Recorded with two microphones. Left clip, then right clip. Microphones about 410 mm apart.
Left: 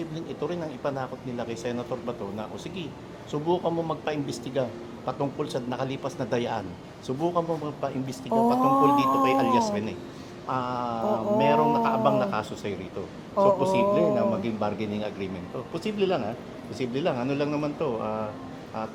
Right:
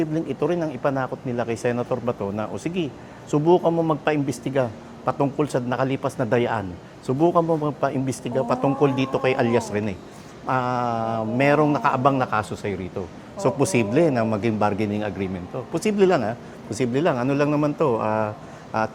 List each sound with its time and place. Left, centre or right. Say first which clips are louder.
0.1 s speech: right 8 dB; right